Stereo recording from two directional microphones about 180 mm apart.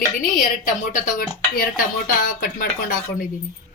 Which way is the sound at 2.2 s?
50° left (ahead or behind).